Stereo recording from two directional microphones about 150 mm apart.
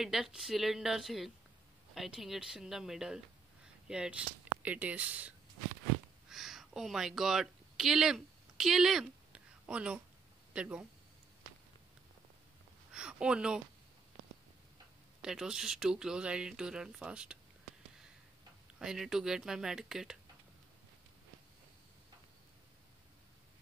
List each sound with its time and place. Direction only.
0.0 s speech: 5° right (ahead or behind)
6.2 s a sound: centre (ahead or behind)
10.5 s speech: 5° right (ahead or behind)
12.9 s a sound: 5° right (ahead or behind)
15.2 s speech: 5° right (ahead or behind)
18.8 s speech: 5° right (ahead or behind)